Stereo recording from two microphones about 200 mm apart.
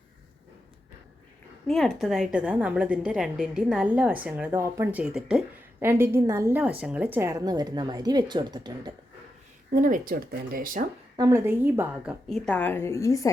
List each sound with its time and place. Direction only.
1.6 s a woman's voice: centre (ahead or behind); by 8.9 s 20° right (ahead or behind)
9.7 s speech: 40° right (ahead or behind)
11.2 s a woman's voice: 15° right (ahead or behind)
12.3 s a woman's voice: 5° left (ahead or behind)